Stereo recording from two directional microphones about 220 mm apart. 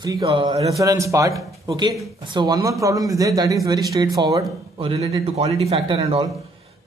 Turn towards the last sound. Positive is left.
turn(degrees=-25)  # may be behind; listen again after turning